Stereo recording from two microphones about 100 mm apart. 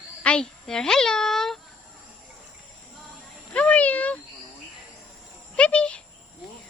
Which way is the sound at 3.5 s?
15° left (ahead or behind).